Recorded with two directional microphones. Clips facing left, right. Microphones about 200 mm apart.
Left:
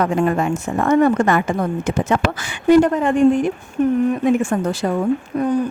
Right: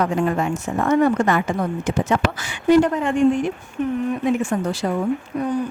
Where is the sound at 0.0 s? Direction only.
55° left (ahead or behind).